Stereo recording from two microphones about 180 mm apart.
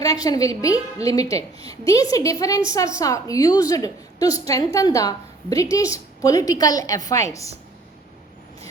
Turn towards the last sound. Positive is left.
turn(degrees=15)  # may be behind; listen again after turning